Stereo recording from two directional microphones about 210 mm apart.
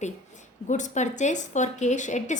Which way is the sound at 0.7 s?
35° left (ahead or behind).